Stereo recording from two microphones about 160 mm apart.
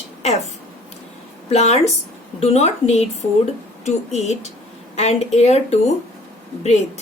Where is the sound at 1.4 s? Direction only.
40° left (ahead or behind).